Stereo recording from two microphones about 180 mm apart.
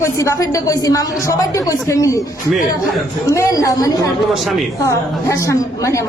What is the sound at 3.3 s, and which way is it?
A woman's voice, 15° left (ahead or behind).